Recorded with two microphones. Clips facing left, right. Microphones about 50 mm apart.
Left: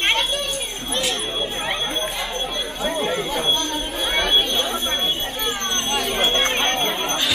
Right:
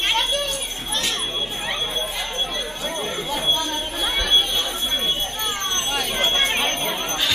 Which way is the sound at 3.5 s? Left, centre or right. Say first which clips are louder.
Left 1 dB; centre.